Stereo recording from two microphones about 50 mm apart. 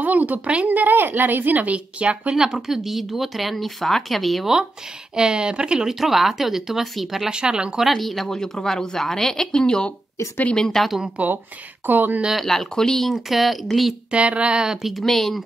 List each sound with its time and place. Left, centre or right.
0.0 s a woman's voice: right
2.3 s speech: centre
5.1 s speech: centre
5.9 s speech: centre
7.2 s speech: centre
7.8 s speech: centre
8.4 s speech: centre
11.2 s a woman's voice: right
11.8 s a woman's voice: right
12.4 s speech: centre
14.1 s speech: right; by 15.4 s centre